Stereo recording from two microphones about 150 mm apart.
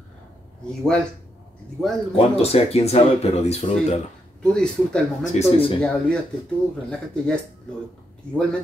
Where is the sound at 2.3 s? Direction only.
45° left (ahead or behind).